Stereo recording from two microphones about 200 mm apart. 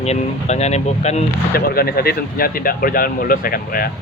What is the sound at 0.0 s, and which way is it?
Speech, 35° left (ahead or behind).